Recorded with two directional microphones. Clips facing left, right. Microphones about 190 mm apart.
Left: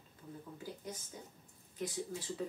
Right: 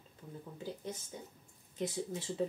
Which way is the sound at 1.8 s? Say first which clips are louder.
Right 3 dB; 25° right (ahead or behind).